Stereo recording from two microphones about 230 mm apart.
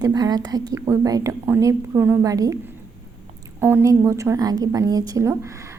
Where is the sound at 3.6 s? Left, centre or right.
Centre.